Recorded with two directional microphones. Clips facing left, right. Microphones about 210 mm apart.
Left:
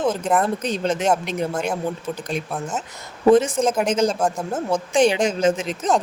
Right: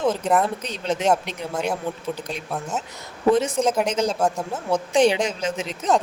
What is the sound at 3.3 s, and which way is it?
Speech, 45° left (ahead or behind).